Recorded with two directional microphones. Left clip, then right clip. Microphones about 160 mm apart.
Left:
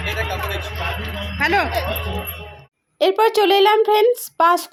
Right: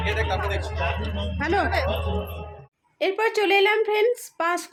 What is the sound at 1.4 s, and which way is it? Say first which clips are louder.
Speech: left 6 dB; centre (ahead or behind).